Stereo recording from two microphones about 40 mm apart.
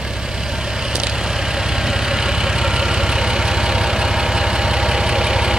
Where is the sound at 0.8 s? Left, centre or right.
Centre.